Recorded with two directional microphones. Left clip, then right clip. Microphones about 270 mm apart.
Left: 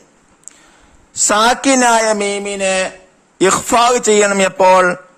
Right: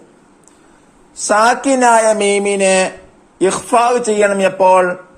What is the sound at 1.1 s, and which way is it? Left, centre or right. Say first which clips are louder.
A man's voice: right 1 dB; left.